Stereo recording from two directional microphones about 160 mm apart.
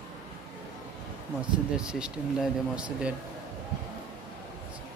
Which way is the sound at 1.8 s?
5° right (ahead or behind).